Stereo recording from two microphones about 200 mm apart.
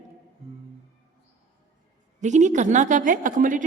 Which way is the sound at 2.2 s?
35° right (ahead or behind).